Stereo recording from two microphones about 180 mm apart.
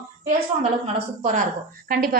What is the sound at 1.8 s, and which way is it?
Speech, 55° right (ahead or behind).